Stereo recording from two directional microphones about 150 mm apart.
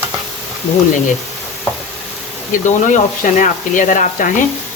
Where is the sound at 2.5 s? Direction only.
60° left (ahead or behind).